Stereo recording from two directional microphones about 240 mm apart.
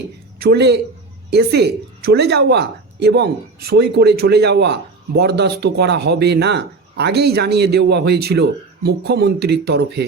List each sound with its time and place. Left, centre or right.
0.3 s a woman's voice: right